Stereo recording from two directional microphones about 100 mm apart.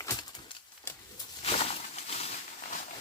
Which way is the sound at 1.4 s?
90° left.